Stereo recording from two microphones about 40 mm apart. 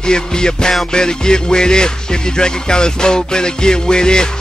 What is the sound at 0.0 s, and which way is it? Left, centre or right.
Music, centre.